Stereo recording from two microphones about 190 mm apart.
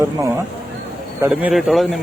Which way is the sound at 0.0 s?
15° right (ahead or behind).